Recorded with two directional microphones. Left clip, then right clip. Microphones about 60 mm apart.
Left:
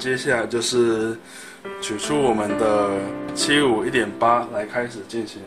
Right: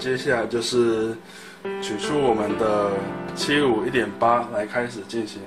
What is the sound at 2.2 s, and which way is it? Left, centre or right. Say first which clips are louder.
Speech: left 1 dB; left.